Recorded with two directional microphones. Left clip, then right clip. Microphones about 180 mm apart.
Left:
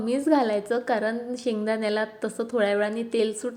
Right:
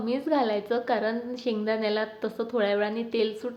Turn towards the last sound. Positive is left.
turn(degrees=20)  # may be behind; listen again after turning